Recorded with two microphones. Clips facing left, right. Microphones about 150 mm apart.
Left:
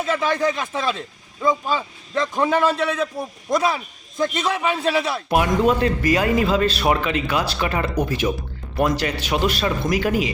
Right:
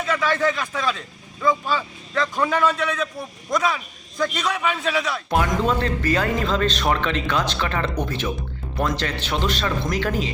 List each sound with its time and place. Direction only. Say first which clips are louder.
0.0 s speech: left 1 dB; 30° left (ahead or behind)
0.3 s a man's voice: left 1 dB; 15° left (ahead or behind)
5.3 s a man's voice: left 3 dB; 15° left (ahead or behind)